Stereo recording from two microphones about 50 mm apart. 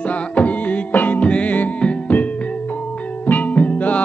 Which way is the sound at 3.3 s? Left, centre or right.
Left.